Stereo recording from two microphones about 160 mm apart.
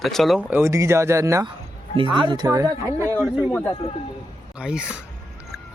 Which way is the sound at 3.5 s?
10° left (ahead or behind).